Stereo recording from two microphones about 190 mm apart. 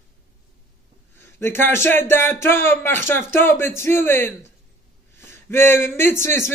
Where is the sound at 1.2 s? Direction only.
10° left (ahead or behind).